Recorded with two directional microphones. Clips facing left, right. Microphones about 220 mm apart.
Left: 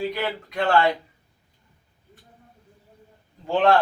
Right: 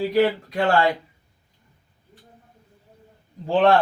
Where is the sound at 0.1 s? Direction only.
35° right (ahead or behind).